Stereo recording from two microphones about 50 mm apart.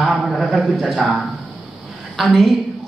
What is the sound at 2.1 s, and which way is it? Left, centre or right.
Speech, centre.